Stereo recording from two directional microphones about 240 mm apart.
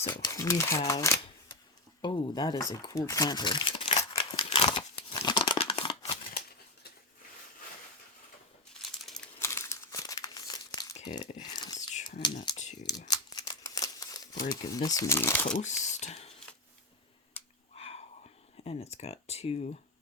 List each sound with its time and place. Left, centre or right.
0.0 s speech: centre
2.8 s crumpling: centre
9.0 s crumpling: centre
10.9 s a sound: centre
11.5 s whispering: centre
12.2 s typing: centre
13.1 s typewriter: centre
14.5 s speech: centre
15.5 s a sound: left
17.7 s wheeze: left
18.6 s speech: left